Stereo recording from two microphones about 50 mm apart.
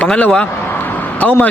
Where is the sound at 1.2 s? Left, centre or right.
Left.